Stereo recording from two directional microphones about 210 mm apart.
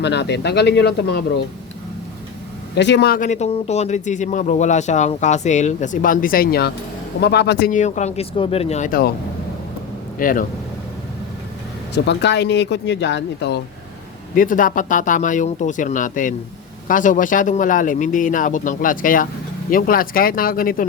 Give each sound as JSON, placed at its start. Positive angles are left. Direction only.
{"t": 0.0, "sound": "speech", "side_deg": 55}
{"t": 2.7, "sound": "speech", "side_deg": 55}
{"t": 7.7, "sound": "speech", "side_deg": 35}
{"t": 10.2, "sound": "speech", "side_deg": 40}
{"t": 11.9, "sound": "speech", "side_deg": 55}
{"t": 14.3, "sound": "speech", "side_deg": 40}